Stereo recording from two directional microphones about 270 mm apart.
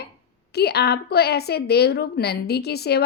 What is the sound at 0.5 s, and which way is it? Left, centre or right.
A woman's voice, left.